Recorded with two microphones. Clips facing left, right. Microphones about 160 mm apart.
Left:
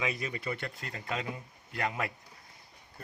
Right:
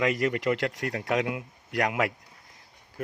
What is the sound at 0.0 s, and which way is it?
Speech, 90° right.